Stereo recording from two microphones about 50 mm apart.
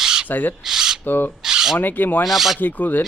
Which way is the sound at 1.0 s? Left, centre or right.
Left.